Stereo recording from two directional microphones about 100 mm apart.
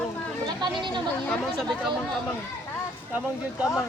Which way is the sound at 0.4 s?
45° right (ahead or behind).